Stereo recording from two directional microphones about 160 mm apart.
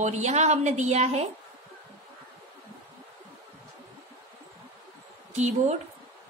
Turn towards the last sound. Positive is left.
turn(degrees=-45)  # may be behind; listen again after turning